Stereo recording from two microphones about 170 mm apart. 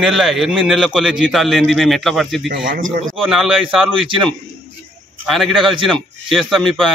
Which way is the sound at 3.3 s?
Centre (ahead or behind).